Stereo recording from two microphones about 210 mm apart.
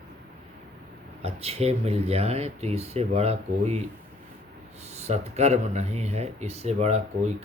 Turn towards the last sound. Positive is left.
turn(degrees=-30)  # may be behind; listen again after turning